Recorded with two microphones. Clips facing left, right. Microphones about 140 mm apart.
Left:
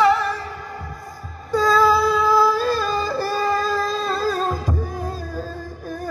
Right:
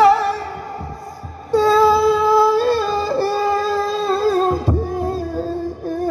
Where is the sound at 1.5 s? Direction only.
25° right (ahead or behind).